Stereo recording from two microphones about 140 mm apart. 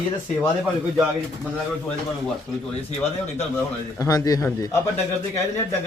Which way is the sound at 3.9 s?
25° left (ahead or behind).